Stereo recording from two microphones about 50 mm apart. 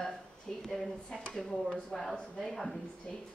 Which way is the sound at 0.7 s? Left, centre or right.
Centre.